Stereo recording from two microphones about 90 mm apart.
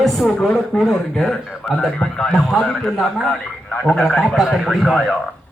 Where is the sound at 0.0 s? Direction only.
Centre (ahead or behind).